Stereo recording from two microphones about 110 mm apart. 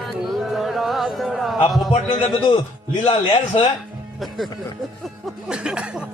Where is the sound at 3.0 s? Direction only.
90° left.